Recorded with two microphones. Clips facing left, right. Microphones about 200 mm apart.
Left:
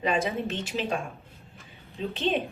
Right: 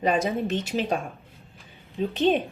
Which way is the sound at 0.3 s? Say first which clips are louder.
Right 4 dB; 40° right (ahead or behind).